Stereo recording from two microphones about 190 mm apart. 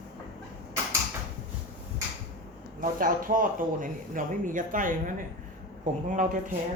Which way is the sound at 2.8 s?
45° right (ahead or behind).